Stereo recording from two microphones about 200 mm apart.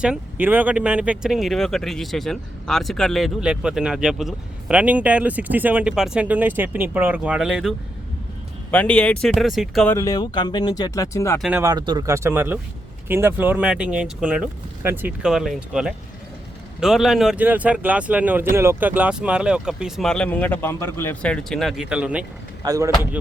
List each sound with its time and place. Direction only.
0.0 s speech: 5° right (ahead or behind)
9.9 s speech: 15° left (ahead or behind)
11.3 s speech: centre (ahead or behind)
11.6 s speech: 20° right (ahead or behind)
22.6 s speech: 15° right (ahead or behind)